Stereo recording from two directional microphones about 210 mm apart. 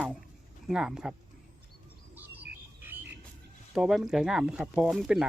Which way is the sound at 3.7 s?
Centre (ahead or behind).